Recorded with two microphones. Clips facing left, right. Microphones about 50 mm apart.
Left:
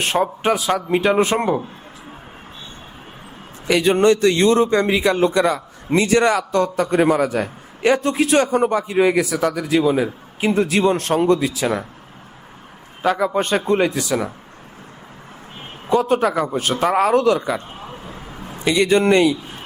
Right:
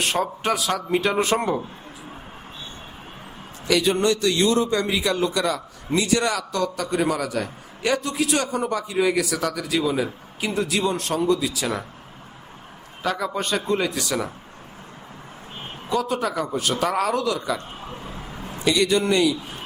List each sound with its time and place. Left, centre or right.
0.0 s a man's voice: left
3.7 s a man's voice: left
11.6 s a man's voice: centre
13.1 s a man's voice: left
14.1 s a man's voice: centre
15.9 s a man's voice: left
18.1 s a sound: left